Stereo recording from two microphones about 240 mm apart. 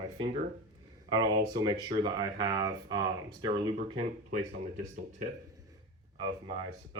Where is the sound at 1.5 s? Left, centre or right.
Centre.